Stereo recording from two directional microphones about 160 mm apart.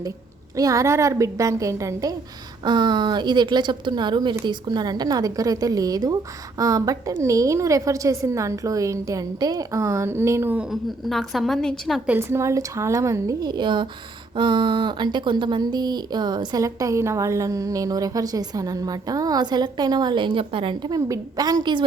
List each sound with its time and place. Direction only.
0.5 s speech: 20° right (ahead or behind); by 12.1 s centre (ahead or behind)
12.1 s speech: 15° right (ahead or behind)